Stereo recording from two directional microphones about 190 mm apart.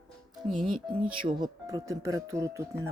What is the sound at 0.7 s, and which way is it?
Speech, 25° right (ahead or behind).